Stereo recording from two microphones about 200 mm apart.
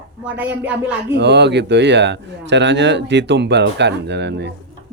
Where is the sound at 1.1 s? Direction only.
60° right (ahead or behind).